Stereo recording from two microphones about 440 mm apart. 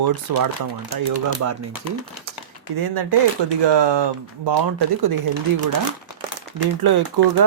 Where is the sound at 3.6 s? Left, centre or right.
Right.